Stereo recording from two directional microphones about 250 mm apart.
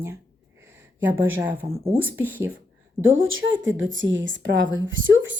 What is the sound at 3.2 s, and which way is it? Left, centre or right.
A woman's voice, right.